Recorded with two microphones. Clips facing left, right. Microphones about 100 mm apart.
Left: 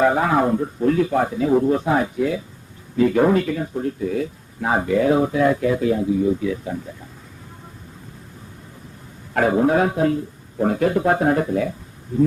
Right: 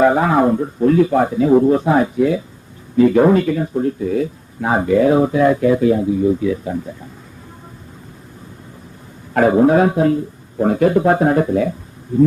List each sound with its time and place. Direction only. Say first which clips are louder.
0.0 s speech: right 4 dB; 25° right (ahead or behind)
9.3 s speech: right 5 dB; 30° right (ahead or behind)